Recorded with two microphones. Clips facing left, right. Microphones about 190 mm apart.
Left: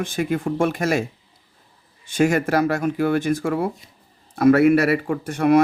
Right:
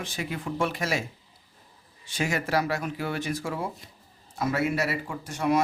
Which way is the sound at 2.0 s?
50° left (ahead or behind).